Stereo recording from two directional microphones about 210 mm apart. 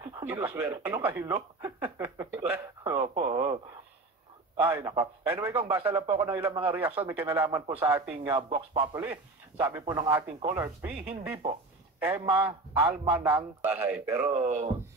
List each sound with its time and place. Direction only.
0.0 s speech: 10° right (ahead or behind)
4.6 s a man's voice: 10° right (ahead or behind)
8.4 s speech: 25° right (ahead or behind)
9.0 s a man's voice: 10° right (ahead or behind)
12.4 s a man's voice: 15° right (ahead or behind)
13.6 s a man's voice: 10° right (ahead or behind)